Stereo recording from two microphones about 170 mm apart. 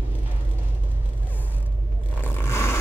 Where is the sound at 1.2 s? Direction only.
10° left (ahead or behind).